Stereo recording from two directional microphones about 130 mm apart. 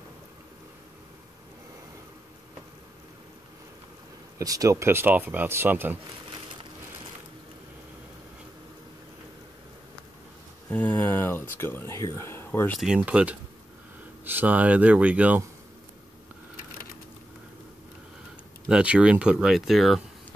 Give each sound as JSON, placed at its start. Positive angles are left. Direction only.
{"t": 4.4, "sound": "speech", "side_deg": -25}
{"t": 10.7, "sound": "speech", "side_deg": 15}
{"t": 12.8, "sound": "speech", "side_deg": -5}
{"t": 18.7, "sound": "speech", "side_deg": -10}